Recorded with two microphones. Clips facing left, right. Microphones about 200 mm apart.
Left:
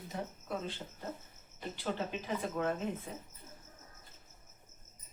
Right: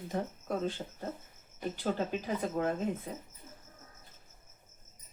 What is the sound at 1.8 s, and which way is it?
Speech, 45° right (ahead or behind).